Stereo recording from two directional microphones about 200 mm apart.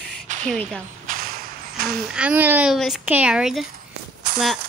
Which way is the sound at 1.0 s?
45° right (ahead or behind).